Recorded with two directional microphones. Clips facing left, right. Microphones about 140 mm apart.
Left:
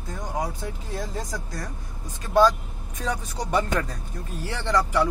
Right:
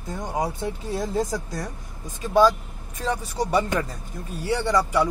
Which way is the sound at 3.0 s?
5° right (ahead or behind).